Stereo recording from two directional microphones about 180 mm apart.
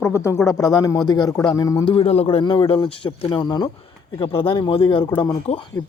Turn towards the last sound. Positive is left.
turn(degrees=25)  # may be behind; listen again after turning